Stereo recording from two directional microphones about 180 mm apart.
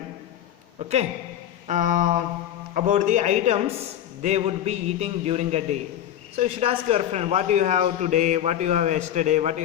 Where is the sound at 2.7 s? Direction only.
40° right (ahead or behind).